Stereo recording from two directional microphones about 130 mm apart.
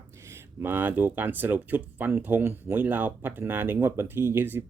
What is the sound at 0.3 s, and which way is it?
Speech, 15° right (ahead or behind).